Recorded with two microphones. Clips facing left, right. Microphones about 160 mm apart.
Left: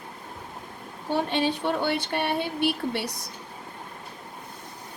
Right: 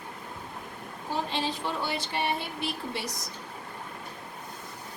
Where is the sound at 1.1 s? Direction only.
65° left (ahead or behind).